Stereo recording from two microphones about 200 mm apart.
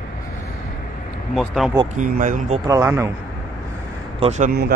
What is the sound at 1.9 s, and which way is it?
Speech, 40° right (ahead or behind).